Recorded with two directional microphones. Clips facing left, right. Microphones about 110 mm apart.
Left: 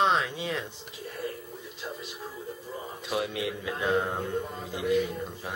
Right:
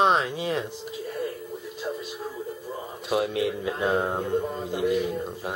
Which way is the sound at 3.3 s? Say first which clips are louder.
Right 6 dB; 45° right (ahead or behind).